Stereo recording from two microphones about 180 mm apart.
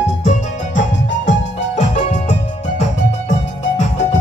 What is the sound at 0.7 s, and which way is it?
Music, 90° left.